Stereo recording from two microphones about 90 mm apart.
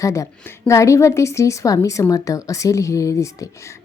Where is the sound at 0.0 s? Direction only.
35° left (ahead or behind).